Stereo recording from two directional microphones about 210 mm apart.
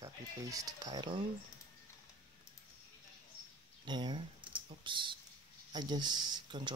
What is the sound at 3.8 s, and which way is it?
Speech, 20° right (ahead or behind).